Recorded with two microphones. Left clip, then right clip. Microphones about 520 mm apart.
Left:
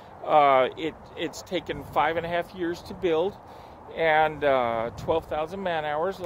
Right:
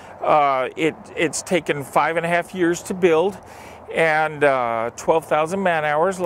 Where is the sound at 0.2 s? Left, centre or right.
Right.